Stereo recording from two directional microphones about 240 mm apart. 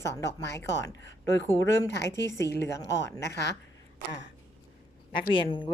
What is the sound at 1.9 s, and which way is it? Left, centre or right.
Speech, left.